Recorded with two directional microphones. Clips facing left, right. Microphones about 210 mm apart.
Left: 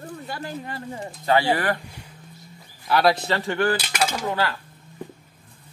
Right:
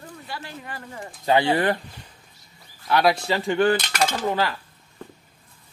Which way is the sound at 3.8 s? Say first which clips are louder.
Right 1 dB; 10° left (ahead or behind).